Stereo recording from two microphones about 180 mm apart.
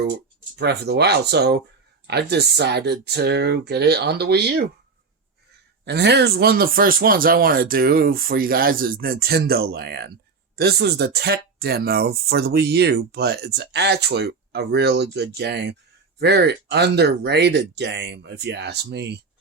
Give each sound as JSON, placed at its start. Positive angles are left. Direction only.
{"t": 0.5, "sound": "speech", "side_deg": -65}
{"t": 5.8, "sound": "speech", "side_deg": -70}